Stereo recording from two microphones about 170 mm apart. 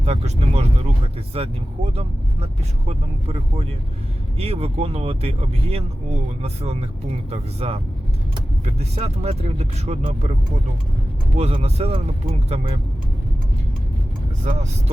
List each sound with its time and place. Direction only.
0.0 s speech: 40° right (ahead or behind)
11.3 s speech: 35° right (ahead or behind)